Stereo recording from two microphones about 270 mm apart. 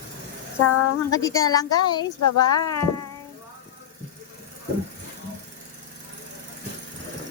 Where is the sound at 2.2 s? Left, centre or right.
Left.